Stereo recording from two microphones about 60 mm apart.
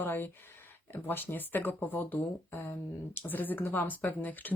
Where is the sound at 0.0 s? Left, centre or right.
Left.